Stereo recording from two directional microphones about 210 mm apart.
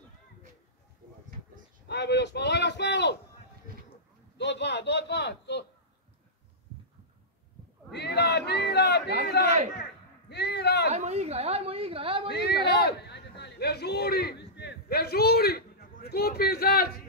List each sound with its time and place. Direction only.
1.9 s speech: 55° left (ahead or behind)
4.4 s a man's voice: 55° left (ahead or behind)
7.9 s a sound: 55° left (ahead or behind)
10.3 s a sound: 55° left (ahead or behind)
10.9 s a woman's voice: 30° right (ahead or behind)
12.3 s a man's voice: 50° left (ahead or behind)